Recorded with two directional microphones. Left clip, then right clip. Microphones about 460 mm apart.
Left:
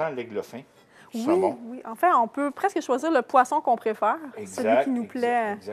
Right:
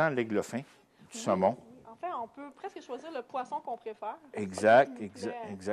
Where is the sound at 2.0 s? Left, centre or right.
Left.